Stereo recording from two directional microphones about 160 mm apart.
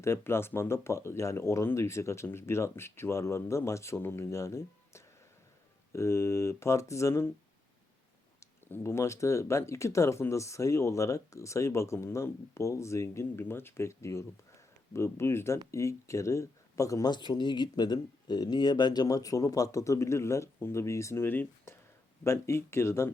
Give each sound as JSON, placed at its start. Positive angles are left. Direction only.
{"t": 0.0, "sound": "speech", "side_deg": 15}
{"t": 8.4, "sound": "speech", "side_deg": 15}